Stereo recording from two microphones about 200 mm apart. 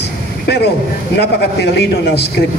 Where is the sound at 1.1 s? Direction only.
55° left (ahead or behind).